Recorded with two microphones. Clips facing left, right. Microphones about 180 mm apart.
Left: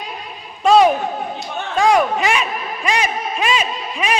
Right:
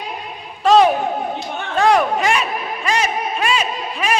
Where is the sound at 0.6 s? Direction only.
10° left (ahead or behind).